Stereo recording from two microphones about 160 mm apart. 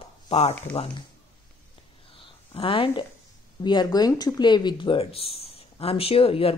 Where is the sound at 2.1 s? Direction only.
35° left (ahead or behind).